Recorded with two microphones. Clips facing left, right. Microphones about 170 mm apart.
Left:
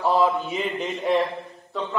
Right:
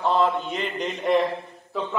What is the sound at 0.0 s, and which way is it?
A man's voice, 5° left (ahead or behind).